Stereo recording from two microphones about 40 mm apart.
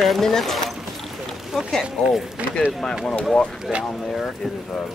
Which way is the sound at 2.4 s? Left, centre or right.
Right.